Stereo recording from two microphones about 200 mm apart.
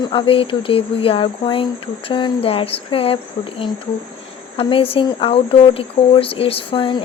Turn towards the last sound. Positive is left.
turn(degrees=25)  # may be behind; listen again after turning